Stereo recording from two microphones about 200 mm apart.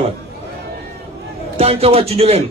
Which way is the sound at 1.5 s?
30° right (ahead or behind).